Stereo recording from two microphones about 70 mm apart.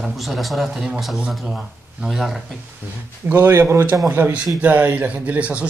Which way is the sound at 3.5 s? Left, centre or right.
Right.